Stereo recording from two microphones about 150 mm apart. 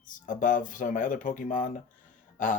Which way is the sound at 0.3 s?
60° left (ahead or behind).